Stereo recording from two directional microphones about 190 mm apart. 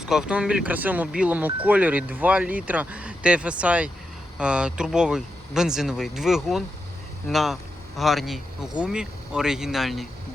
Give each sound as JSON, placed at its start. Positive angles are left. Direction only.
{"t": 0.0, "sound": "speech", "side_deg": -5}